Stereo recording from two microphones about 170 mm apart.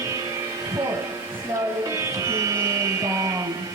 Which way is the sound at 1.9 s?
20° right (ahead or behind).